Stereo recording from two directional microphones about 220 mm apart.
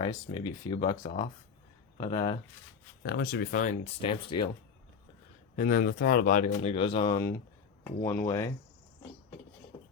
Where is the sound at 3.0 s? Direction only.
45° left (ahead or behind); by 4.5 s 25° left (ahead or behind).